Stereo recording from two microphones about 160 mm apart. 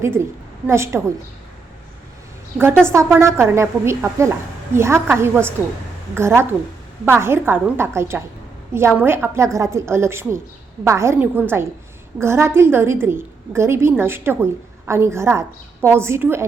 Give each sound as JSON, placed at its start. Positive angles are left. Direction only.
{"t": 0.7, "sound": "a woman's voice", "side_deg": -15}
{"t": 2.8, "sound": "a woman's voice", "side_deg": -15}